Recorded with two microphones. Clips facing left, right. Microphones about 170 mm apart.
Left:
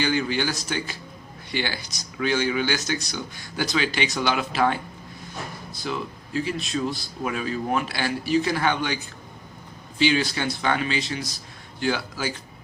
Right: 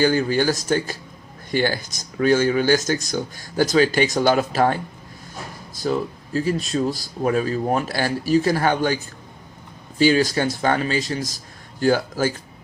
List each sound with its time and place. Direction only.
0.0 s speech: 45° right (ahead or behind)